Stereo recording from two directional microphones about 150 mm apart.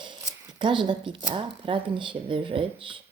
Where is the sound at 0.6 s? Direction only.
35° right (ahead or behind).